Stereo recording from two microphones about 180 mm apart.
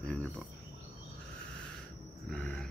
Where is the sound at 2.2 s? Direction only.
5° left (ahead or behind).